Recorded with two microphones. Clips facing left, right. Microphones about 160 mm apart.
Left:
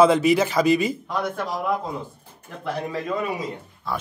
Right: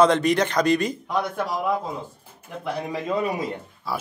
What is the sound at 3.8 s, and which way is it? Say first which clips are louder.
Speech: even; 5° right (ahead or behind).